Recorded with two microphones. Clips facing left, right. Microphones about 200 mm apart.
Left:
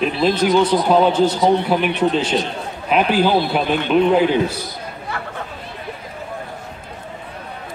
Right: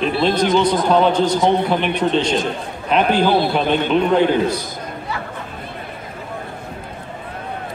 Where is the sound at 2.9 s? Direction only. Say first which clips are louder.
Even; 5° left (ahead or behind).